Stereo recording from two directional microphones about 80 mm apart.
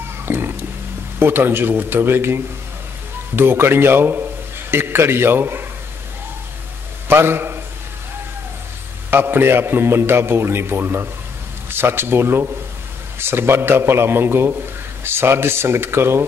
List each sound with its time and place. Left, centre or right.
0.2 s a sound: right
1.2 s a man's voice: right
7.1 s a man's voice: right
9.1 s a man's voice: right